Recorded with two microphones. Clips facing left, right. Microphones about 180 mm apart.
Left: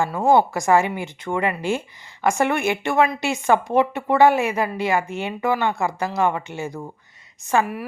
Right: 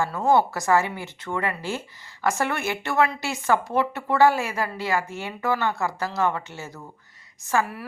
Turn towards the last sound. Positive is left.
turn(degrees=15)  # may be behind; listen again after turning